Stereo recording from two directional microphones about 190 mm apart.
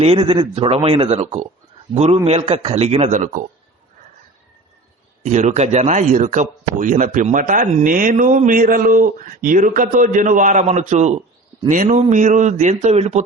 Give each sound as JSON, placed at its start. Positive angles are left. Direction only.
{"t": 0.0, "sound": "a man's voice", "side_deg": -30}
{"t": 5.2, "sound": "a man's voice", "side_deg": -40}